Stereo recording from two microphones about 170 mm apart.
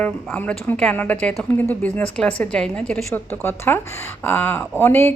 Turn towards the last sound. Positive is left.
turn(degrees=10)  # may be behind; listen again after turning